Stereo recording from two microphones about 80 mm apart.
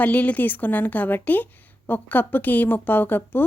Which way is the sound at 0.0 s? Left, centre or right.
Centre.